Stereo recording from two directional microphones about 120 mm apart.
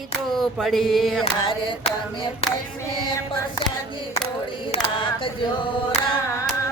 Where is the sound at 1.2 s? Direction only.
45° left (ahead or behind).